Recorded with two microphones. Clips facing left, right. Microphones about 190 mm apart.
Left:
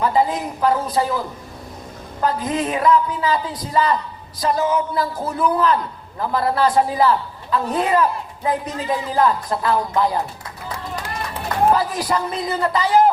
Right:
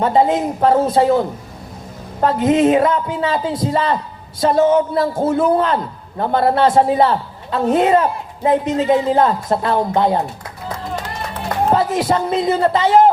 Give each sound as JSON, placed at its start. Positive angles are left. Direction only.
{"t": 0.0, "sound": "a woman's voice", "side_deg": -30}
{"t": 2.2, "sound": "a woman's voice", "side_deg": -25}
{"t": 11.7, "sound": "a woman's voice", "side_deg": -25}